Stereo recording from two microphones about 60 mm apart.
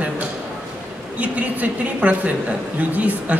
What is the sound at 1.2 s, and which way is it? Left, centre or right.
A woman's voice, right.